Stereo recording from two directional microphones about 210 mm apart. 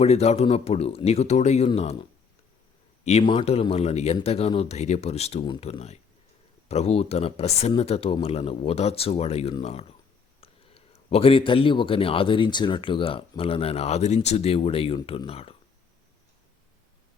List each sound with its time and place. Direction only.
0.0 s a man's voice: 30° left (ahead or behind)